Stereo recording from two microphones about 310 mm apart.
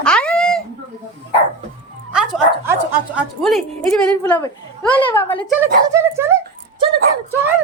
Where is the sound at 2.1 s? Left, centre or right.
Centre.